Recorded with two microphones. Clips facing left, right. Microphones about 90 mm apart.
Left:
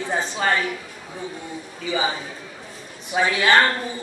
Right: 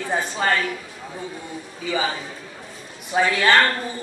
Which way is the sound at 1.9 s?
15° left (ahead or behind).